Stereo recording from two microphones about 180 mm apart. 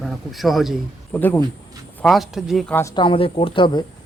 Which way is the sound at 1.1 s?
15° left (ahead or behind).